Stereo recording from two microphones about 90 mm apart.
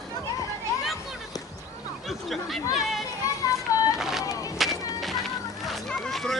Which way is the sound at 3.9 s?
5° right (ahead or behind).